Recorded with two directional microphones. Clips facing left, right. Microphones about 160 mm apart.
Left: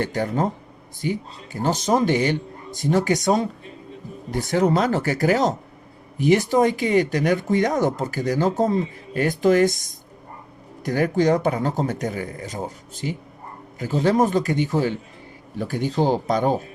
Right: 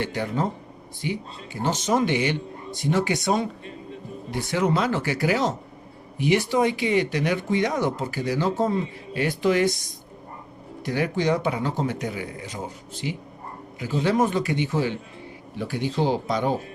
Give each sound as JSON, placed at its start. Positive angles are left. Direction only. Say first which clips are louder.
{"t": 0.0, "sound": "speech", "louder": "left 3 dB", "side_deg": 45}
{"t": 10.8, "sound": "a man's voice", "louder": "left 4 dB", "side_deg": 45}